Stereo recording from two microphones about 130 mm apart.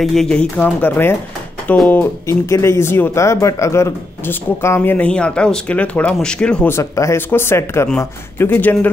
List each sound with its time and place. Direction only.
0.0 s speech: centre (ahead or behind)
6.7 s speech: 20° left (ahead or behind)